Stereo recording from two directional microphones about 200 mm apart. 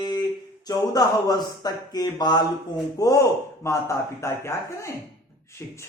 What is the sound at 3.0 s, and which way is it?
Speech, 20° left (ahead or behind).